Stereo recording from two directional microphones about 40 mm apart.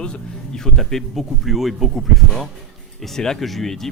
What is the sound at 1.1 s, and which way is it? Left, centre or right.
Speech, centre.